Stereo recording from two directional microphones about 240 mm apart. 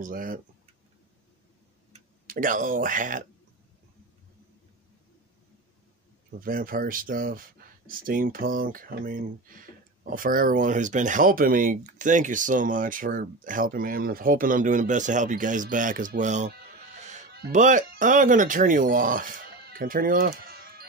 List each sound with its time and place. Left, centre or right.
0.0 s speech: right
1.9 s speech: right
6.4 s speech: right
17.0 s music: right
17.3 s speech: right